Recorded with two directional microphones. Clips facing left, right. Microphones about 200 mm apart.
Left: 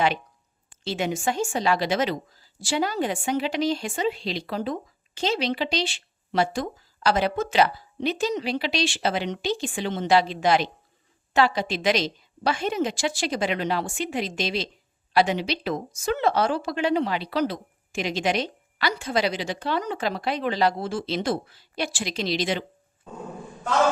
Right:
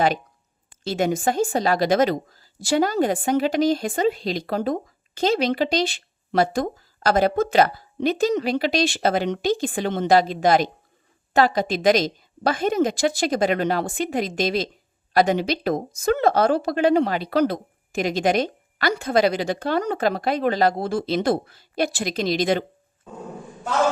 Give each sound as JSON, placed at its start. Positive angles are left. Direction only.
{"t": 0.9, "sound": "speech", "side_deg": -45}